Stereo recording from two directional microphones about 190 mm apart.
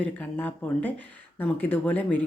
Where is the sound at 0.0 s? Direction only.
10° left (ahead or behind).